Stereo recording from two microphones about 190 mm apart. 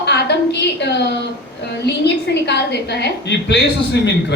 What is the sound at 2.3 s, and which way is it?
A woman's voice, 60° left (ahead or behind).